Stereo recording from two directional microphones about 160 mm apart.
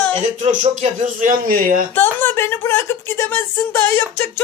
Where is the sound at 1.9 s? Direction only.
15° left (ahead or behind).